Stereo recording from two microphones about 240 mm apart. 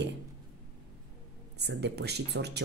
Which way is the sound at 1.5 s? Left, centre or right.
Right.